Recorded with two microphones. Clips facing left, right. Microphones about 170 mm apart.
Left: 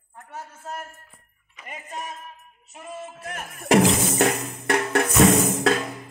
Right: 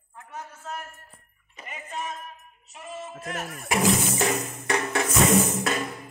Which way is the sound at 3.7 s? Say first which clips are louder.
Left 5 dB; 60° left (ahead or behind).